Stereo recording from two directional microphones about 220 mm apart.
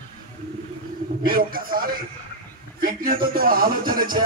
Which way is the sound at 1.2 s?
40° right (ahead or behind).